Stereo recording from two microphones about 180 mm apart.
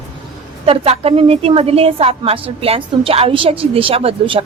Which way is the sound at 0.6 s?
35° right (ahead or behind).